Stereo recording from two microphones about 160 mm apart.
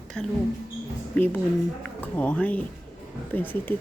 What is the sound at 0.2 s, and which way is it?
Speech, 5° left (ahead or behind).